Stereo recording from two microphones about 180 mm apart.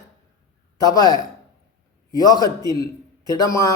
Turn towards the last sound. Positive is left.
turn(degrees=15)  # may be behind; listen again after turning